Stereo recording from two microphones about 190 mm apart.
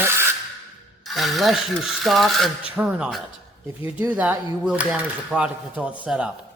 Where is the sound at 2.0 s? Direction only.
Centre (ahead or behind).